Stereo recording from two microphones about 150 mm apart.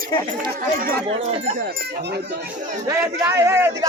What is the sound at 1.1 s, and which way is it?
Speech, 50° right (ahead or behind).